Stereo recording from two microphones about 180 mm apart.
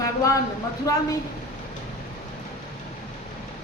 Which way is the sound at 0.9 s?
20° left (ahead or behind).